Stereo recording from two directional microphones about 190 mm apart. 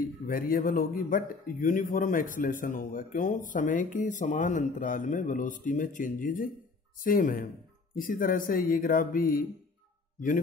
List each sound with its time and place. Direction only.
0.0 s speech: 50° left (ahead or behind)